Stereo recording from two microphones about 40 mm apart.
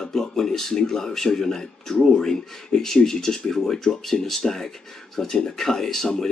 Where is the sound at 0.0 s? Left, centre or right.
Centre.